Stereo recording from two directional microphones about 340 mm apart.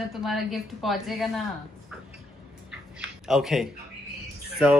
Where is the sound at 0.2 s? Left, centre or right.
Centre.